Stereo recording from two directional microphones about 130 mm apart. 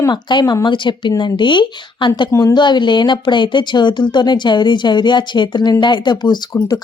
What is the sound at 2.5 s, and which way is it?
Speech, 35° left (ahead or behind).